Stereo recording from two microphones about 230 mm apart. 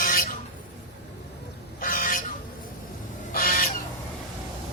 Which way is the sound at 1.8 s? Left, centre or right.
Left.